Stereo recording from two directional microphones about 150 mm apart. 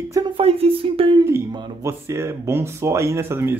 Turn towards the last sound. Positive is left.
turn(degrees=-15)  # may be behind; listen again after turning